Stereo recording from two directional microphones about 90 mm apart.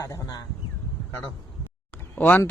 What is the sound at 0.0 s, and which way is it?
Speech, 45° left (ahead or behind).